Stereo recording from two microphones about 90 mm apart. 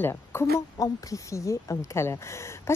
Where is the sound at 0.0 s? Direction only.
30° left (ahead or behind).